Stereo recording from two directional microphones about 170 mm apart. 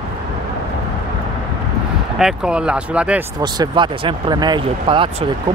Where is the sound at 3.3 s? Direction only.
25° right (ahead or behind).